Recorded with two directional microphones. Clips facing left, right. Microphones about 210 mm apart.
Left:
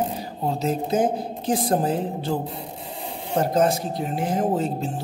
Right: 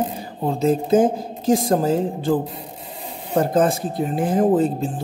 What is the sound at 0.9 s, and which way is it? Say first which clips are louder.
Speech: right 5 dB; 50° right (ahead or behind).